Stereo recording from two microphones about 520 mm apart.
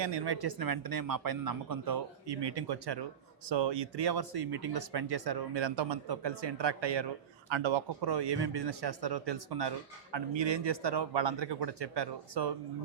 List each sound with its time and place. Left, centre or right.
0.0 s speech: right